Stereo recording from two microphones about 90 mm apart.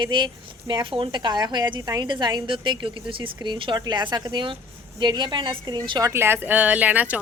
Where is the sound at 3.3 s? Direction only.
55° right (ahead or behind).